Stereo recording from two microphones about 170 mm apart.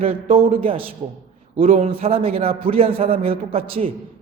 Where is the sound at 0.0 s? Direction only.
35° right (ahead or behind).